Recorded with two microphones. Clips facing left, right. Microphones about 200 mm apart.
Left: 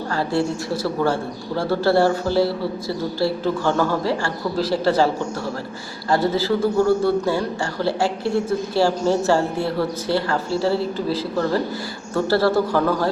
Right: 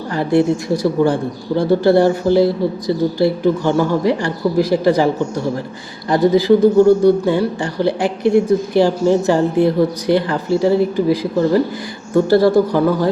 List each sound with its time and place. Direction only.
0.1 s a man's voice: 15° right (ahead or behind)